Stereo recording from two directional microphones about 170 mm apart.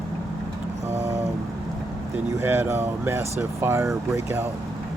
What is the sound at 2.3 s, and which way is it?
Speech, 15° right (ahead or behind).